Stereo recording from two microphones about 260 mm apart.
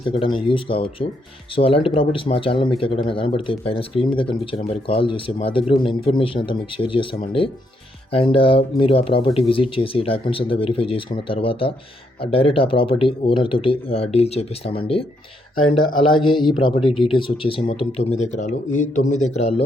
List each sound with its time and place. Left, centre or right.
0.1 s speech: centre
16.0 s speech: centre